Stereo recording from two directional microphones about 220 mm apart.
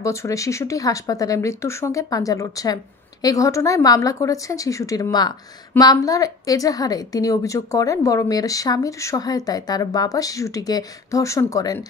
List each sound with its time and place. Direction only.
0.0 s a woman's voice: 15° left (ahead or behind)